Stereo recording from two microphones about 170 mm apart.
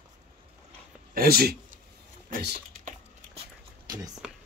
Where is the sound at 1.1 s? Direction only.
60° right (ahead or behind).